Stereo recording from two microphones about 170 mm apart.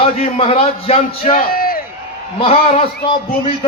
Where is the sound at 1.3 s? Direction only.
60° left (ahead or behind).